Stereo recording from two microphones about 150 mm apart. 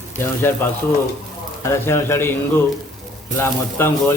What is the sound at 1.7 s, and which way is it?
Speech, 15° left (ahead or behind).